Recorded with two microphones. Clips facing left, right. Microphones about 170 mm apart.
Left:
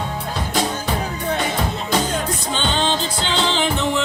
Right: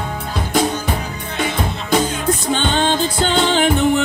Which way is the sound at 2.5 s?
50° right (ahead or behind).